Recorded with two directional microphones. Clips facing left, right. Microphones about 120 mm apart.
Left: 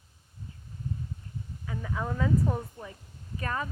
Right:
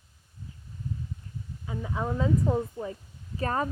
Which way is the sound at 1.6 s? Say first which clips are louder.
Right 2 dB; 20° right (ahead or behind).